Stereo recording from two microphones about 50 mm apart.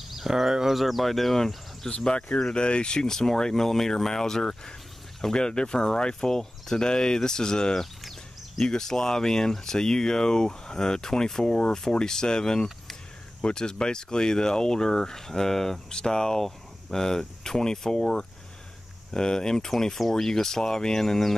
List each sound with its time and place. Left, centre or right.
0.1 s speech: centre
1.9 s speech: centre